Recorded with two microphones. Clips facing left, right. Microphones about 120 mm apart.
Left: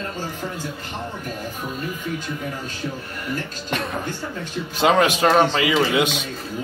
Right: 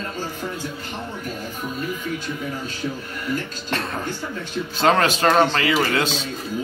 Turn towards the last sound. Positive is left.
turn(degrees=15)  # may be behind; listen again after turning